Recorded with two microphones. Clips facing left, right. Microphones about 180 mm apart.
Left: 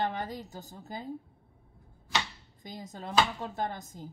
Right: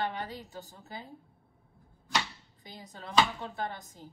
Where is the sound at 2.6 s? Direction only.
45° left (ahead or behind).